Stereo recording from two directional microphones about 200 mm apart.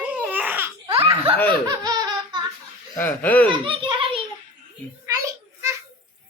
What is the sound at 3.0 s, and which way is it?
Speech, 10° left (ahead or behind).